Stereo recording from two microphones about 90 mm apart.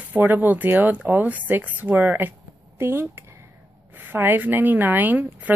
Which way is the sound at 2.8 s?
25° right (ahead or behind).